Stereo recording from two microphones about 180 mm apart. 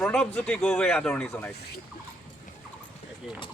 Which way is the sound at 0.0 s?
5° left (ahead or behind).